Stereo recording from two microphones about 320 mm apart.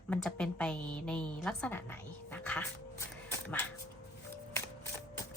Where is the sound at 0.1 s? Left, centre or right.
Centre.